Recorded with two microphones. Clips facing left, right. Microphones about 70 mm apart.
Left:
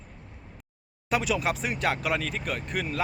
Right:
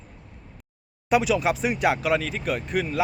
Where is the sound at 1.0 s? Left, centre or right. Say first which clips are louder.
Right 5 dB; centre.